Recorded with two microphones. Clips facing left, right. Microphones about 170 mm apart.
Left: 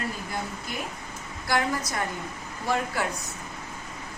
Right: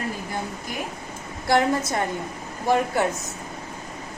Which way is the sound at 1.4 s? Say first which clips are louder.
Right 6 dB; 25° right (ahead or behind).